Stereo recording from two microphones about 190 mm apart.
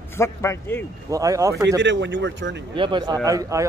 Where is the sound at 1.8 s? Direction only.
70° right (ahead or behind).